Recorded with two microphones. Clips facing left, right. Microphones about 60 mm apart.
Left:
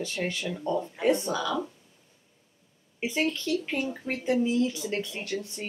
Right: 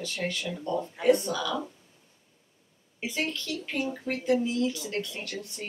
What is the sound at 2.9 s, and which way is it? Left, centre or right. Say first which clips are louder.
Speech: left 4 dB; left.